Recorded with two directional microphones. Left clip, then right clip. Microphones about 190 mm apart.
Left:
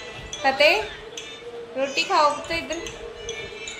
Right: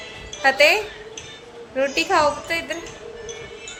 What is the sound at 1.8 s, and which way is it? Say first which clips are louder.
A woman's voice: right 2 dB; 40° right (ahead or behind).